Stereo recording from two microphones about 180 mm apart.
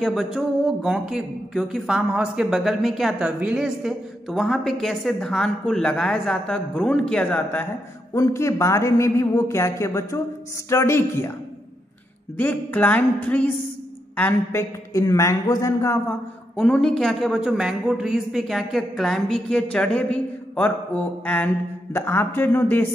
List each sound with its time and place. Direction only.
0.0 s speech: centre (ahead or behind); by 11.3 s 15° left (ahead or behind)
12.4 s speech: 10° left (ahead or behind)
16.5 s speech: 5° left (ahead or behind)